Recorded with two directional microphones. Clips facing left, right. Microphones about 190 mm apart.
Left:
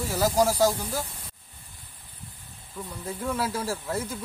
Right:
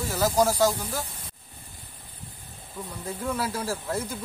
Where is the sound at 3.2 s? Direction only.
Centre (ahead or behind).